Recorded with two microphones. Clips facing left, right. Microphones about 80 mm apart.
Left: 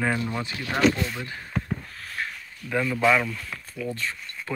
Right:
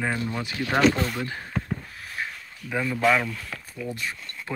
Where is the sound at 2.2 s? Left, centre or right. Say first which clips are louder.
Even; centre.